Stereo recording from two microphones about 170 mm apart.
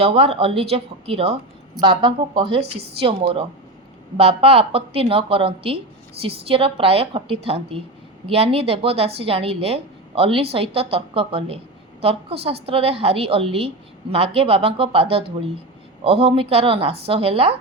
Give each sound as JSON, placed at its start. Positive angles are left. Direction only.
{"t": 0.0, "sound": "a woman's voice", "side_deg": -35}